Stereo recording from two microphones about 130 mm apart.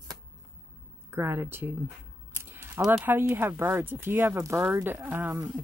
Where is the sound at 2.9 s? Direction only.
15° right (ahead or behind).